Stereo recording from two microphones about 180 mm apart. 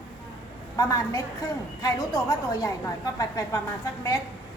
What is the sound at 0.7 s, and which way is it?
A woman's voice, 20° left (ahead or behind).